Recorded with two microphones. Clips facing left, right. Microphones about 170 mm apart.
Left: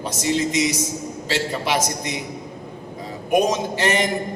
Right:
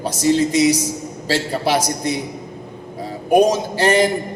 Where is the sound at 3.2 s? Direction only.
35° right (ahead or behind).